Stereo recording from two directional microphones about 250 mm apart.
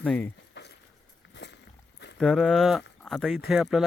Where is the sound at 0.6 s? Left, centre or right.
Left.